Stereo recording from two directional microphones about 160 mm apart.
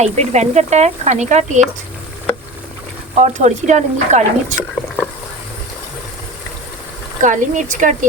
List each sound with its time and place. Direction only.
0.0 s speech: 45° right (ahead or behind)
3.2 s speech: 45° right (ahead or behind)
7.2 s speech: 50° right (ahead or behind)